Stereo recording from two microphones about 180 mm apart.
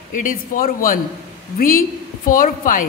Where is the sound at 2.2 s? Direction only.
50° left (ahead or behind).